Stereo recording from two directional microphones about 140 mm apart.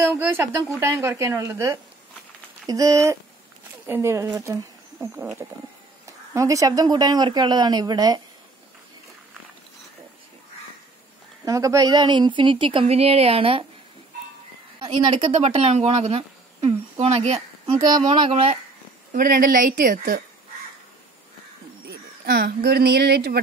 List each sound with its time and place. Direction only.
0.0 s speech: 15° right (ahead or behind)
6.0 s speech: 25° right (ahead or behind)
11.4 s a woman's voice: 25° right (ahead or behind); by 13.7 s 40° right (ahead or behind)
15.4 s speech: 50° right (ahead or behind)
17.7 s a woman's voice: 30° right (ahead or behind)
19.1 s a woman's voice: 85° right
22.2 s speech: 90° right